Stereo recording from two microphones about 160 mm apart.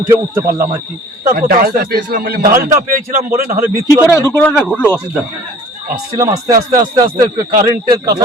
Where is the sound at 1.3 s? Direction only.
70° right (ahead or behind).